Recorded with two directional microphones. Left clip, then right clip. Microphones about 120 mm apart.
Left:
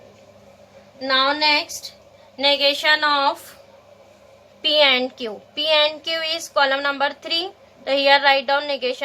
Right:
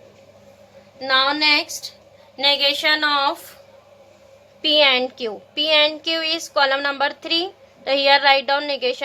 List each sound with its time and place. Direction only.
0.9 s a woman's voice: 80° right
2.3 s speech: 80° right
4.6 s speech: 40° right (ahead or behind)